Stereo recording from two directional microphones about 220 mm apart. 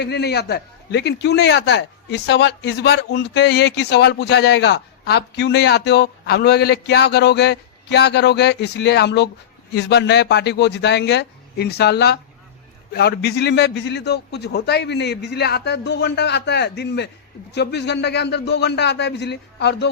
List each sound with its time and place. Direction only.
0.0 s a man's voice: 50° left (ahead or behind)